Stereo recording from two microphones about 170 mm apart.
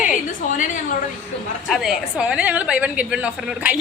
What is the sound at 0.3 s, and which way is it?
Speech, 50° left (ahead or behind).